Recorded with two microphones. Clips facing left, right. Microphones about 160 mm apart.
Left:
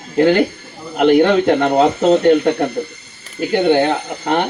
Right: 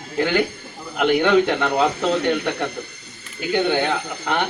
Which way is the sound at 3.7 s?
40° left (ahead or behind).